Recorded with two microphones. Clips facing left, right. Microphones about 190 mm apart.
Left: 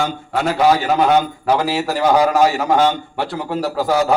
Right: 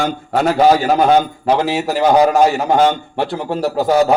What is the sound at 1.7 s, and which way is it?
A man's voice, 20° right (ahead or behind).